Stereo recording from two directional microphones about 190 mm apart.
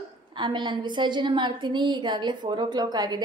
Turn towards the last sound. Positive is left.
turn(degrees=-20)  # may be behind; listen again after turning